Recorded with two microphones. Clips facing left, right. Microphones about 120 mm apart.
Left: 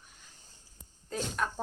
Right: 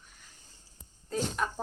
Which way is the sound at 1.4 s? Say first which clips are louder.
Left 2 dB; 5° right (ahead or behind).